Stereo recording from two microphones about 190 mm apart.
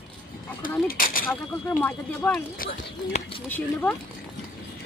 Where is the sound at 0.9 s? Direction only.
50° left (ahead or behind).